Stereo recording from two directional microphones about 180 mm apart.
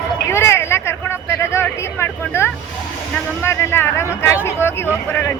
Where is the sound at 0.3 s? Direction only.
15° left (ahead or behind).